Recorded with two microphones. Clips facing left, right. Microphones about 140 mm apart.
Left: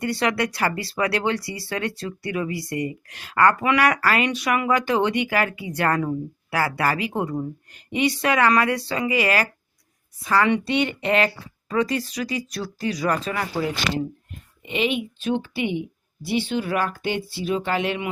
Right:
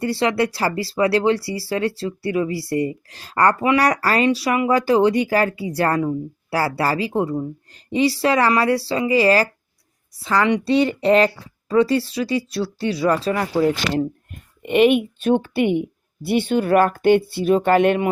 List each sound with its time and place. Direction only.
0.0 s speech: 30° right (ahead or behind)
10.3 s speech: 20° right (ahead or behind)
10.6 s speech: 35° right (ahead or behind)
14.6 s speech: 55° right (ahead or behind)